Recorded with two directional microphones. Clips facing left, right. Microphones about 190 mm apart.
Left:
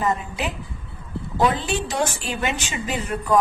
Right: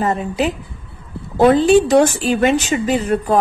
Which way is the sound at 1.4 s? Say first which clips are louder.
Right 12 dB; 45° right (ahead or behind).